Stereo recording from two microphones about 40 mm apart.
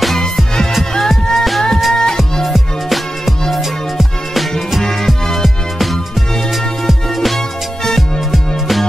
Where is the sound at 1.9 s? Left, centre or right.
Centre.